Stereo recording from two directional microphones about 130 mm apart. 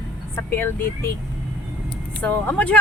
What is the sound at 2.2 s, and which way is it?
Speech, 10° left (ahead or behind).